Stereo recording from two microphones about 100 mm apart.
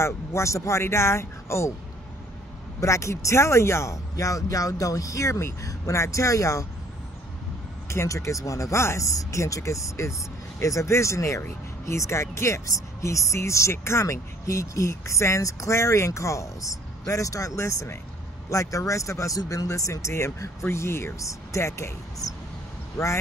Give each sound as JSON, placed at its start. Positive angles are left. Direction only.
{"t": 0.0, "sound": "speech", "side_deg": 30}
{"t": 2.8, "sound": "speech", "side_deg": 30}
{"t": 7.9, "sound": "speech", "side_deg": 30}